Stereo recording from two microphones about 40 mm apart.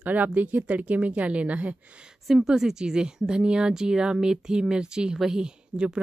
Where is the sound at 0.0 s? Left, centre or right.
Right.